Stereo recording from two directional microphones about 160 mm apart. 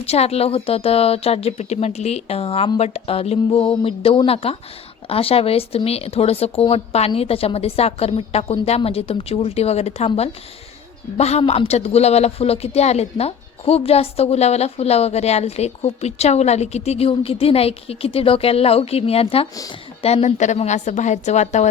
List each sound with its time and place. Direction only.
0.0 s a woman's voice: 40° left (ahead or behind)